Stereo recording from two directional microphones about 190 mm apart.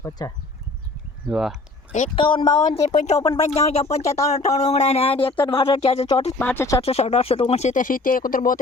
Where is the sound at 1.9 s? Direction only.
40° left (ahead or behind).